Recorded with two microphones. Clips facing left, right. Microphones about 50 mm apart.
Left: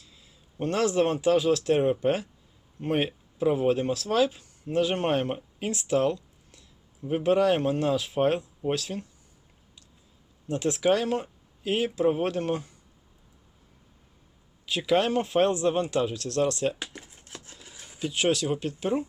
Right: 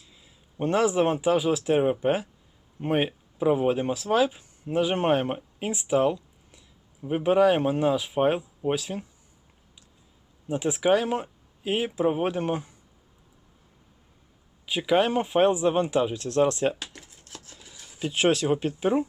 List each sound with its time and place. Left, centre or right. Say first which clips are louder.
0.0 s speech: even; centre
10.5 s speech: right 1 dB; centre
14.7 s speech: right 1 dB; centre
17.0 s chopping: left 1 dB; left
17.7 s a sound: left 2 dB; left
18.0 s speech: right 3 dB; right